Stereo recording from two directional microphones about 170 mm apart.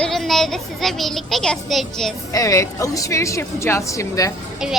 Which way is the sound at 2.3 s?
20° left (ahead or behind).